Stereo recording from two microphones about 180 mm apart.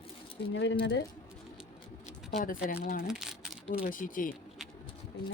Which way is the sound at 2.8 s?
55° left (ahead or behind).